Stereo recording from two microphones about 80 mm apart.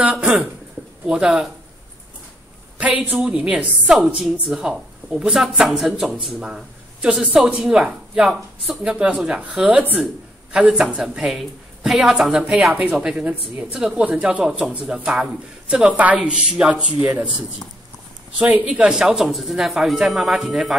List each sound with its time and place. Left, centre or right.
1.0 s a man's voice: centre
2.8 s a man's voice: centre
18.4 s speech: centre